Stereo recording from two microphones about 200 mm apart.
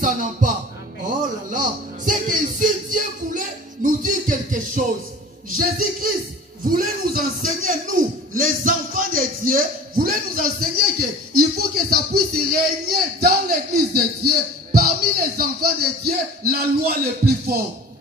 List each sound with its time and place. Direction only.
0.0 s speech: 40° right (ahead or behind)
2.0 s music: 40° right (ahead or behind)
5.5 s speech: 45° right (ahead or behind)